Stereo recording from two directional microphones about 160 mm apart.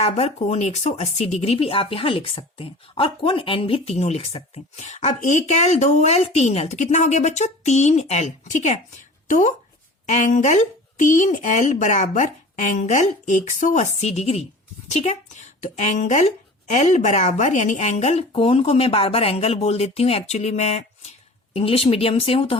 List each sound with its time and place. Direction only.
0.0 s a woman's voice: 45° left (ahead or behind)